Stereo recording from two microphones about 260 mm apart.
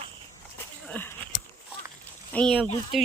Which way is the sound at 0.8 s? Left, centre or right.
Centre.